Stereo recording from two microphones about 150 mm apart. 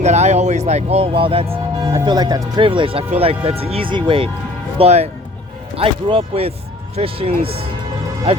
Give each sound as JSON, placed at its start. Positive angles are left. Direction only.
{"t": 0.0, "sound": "speech", "side_deg": -50}
{"t": 2.0, "sound": "speech", "side_deg": -25}
{"t": 4.8, "sound": "speech", "side_deg": -45}